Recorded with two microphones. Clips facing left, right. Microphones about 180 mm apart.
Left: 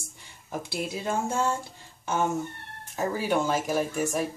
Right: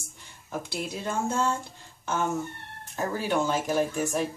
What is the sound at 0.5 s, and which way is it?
Speech, 10° left (ahead or behind).